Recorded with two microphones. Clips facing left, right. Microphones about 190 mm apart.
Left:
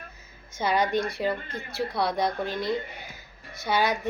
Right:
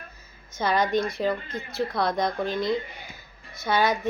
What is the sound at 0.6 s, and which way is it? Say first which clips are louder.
A woman's voice: right 1 dB; 10° left (ahead or behind).